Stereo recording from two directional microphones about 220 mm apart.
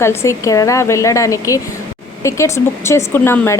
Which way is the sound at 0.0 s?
10° left (ahead or behind).